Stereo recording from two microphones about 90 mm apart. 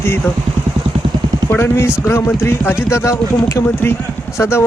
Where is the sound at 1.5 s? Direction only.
25° left (ahead or behind).